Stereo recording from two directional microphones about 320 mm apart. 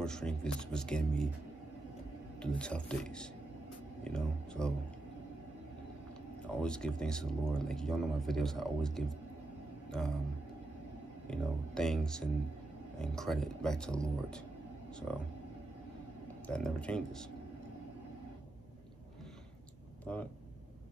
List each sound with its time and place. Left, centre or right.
0.0 s speech: centre
2.4 s speech: centre
6.4 s speech: centre
11.2 s speech: centre
16.4 s speech: centre
20.1 s speech: centre